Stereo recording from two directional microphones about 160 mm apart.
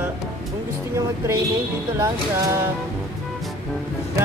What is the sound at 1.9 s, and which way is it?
Speech, 15° right (ahead or behind).